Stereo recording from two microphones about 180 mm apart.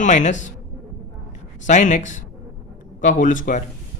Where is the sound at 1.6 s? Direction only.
45° left (ahead or behind).